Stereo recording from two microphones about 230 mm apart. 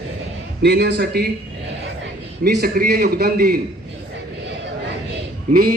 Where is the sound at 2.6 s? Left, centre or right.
Right.